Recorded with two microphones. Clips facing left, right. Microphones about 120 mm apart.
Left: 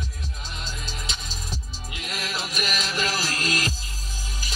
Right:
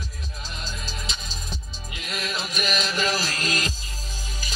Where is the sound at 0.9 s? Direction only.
30° right (ahead or behind).